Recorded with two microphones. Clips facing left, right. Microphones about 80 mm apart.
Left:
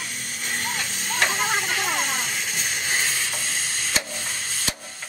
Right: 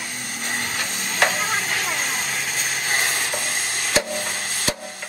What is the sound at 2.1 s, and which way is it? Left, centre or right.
Sizzle, right.